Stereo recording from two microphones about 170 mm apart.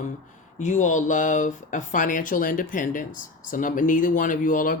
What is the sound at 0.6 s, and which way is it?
Speech, 45° left (ahead or behind).